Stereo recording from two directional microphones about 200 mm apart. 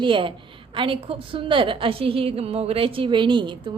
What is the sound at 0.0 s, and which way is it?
A woman's voice, 25° right (ahead or behind).